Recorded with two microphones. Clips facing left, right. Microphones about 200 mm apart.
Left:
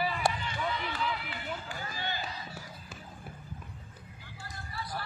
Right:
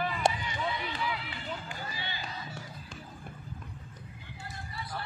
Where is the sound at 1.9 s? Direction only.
45° left (ahead or behind).